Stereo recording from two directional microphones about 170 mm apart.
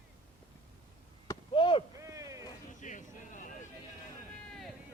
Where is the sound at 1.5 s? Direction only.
30° left (ahead or behind).